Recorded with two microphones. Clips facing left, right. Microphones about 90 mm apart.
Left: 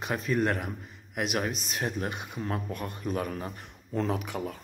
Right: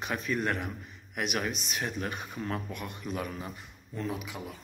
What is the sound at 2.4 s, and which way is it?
Speech, 35° left (ahead or behind).